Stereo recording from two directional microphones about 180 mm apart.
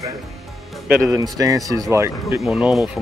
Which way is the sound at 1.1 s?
20° right (ahead or behind).